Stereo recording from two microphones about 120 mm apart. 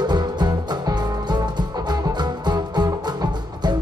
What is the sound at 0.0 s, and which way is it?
Music, 35° right (ahead or behind).